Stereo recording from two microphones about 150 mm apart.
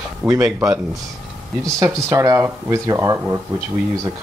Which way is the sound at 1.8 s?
20° right (ahead or behind).